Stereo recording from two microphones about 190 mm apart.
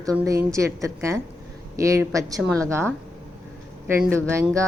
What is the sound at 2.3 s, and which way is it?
Speech, 5° left (ahead or behind).